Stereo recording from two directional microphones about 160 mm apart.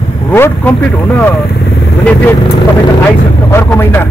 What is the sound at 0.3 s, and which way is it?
Speech, 15° left (ahead or behind).